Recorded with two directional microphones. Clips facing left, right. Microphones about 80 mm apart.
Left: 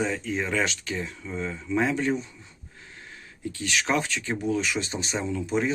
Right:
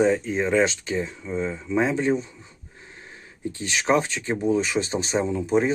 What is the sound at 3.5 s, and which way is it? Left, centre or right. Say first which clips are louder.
Speech: right 4 dB; right.